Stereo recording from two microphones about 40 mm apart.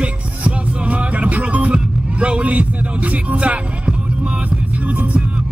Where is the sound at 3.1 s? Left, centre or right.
Right.